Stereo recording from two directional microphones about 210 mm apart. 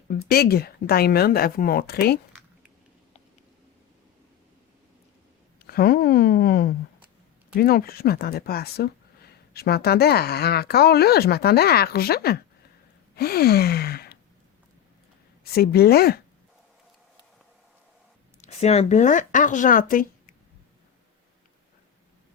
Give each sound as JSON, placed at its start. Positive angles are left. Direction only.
{"t": 0.1, "sound": "speech", "side_deg": 45}
{"t": 5.6, "sound": "speech", "side_deg": 45}
{"t": 13.1, "sound": "gasp", "side_deg": 45}
{"t": 15.5, "sound": "speech", "side_deg": 45}
{"t": 18.4, "sound": "speech", "side_deg": 30}